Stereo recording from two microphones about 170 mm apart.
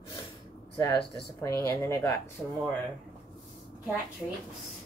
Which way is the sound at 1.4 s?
15° left (ahead or behind).